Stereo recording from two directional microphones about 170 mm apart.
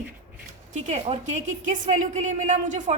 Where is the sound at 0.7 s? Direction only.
45° right (ahead or behind).